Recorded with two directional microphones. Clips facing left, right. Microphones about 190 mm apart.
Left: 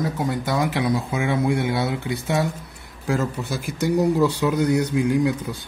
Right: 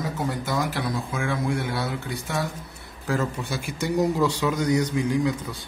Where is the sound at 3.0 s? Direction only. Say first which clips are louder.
Left 3 dB; 10° left (ahead or behind).